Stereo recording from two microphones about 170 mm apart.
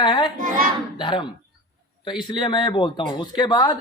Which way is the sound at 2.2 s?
25° left (ahead or behind).